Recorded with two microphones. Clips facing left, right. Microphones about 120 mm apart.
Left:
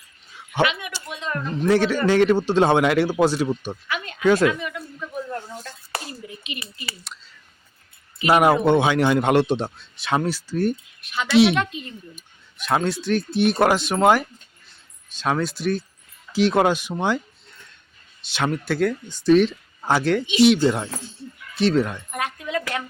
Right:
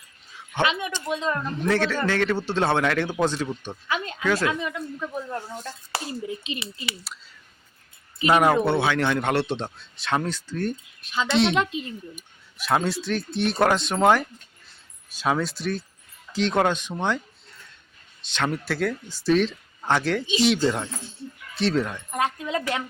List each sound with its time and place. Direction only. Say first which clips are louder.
0.6 s speech: left 2 dB; 30° right (ahead or behind)
1.6 s a man's voice: left 5 dB; 15° left (ahead or behind)
3.8 s speech: right 4 dB; 30° right (ahead or behind)
4.2 s a woman's voice: left 8 dB; 20° left (ahead or behind)
5.3 s speech: even; 20° right (ahead or behind)
8.3 s a man's voice: left 3 dB; 10° left (ahead or behind)
11.5 s speech: even; 25° right (ahead or behind)
12.1 s a man's voice: right 2 dB; centre (ahead or behind)
18.3 s speech: left 3 dB; 5° left (ahead or behind)
22.1 s a woman's voice: right 1 dB; 25° right (ahead or behind)